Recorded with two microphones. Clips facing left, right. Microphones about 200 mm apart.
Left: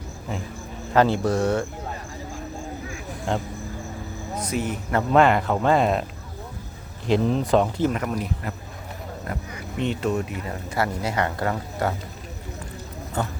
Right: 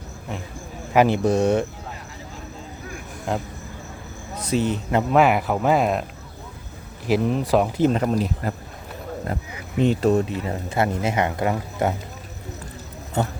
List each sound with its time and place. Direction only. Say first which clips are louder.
0.9 s speech: right 2 dB; 15° right (ahead or behind)
3.3 s speech: even; 5° right (ahead or behind)
4.5 s speech: right 4 dB; 25° right (ahead or behind)
5.1 s speech: left 1 dB; 5° right (ahead or behind)
7.1 s speech: even; 5° right (ahead or behind)
7.8 s speech: right 4 dB; 25° right (ahead or behind)
9.8 s speech: right 6 dB; 35° right (ahead or behind); by 11.9 s 20° right (ahead or behind)